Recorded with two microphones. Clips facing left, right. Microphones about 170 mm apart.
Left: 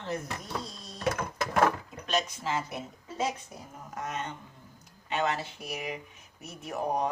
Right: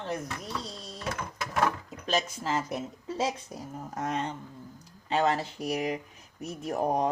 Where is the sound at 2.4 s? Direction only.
40° right (ahead or behind).